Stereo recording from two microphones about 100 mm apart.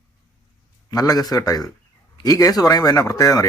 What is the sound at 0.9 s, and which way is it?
Speech, 40° left (ahead or behind).